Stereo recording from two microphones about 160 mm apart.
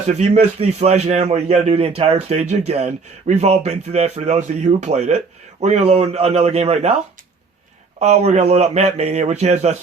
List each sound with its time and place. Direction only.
0.1 s speech: 40° right (ahead or behind)
7.9 s speech: 45° right (ahead or behind)